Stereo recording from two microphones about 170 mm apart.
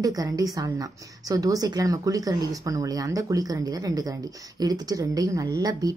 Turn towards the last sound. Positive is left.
turn(degrees=-20)  # may be behind; listen again after turning